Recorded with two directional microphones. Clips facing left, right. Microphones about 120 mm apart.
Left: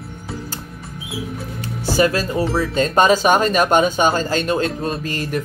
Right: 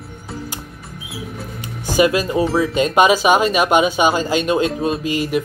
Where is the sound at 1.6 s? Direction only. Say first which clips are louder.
Right 1 dB; 15° right (ahead or behind).